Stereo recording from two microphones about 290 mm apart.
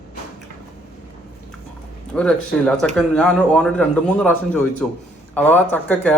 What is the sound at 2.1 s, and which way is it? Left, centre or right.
A man's voice, centre.